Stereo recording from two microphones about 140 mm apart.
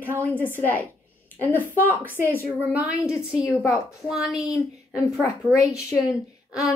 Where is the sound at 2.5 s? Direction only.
10° right (ahead or behind).